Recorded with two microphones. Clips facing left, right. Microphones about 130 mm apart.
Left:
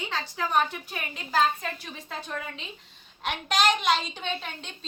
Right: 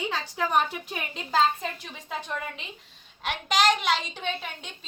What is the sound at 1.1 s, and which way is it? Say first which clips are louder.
Speech: right 1 dB; 25° right (ahead or behind).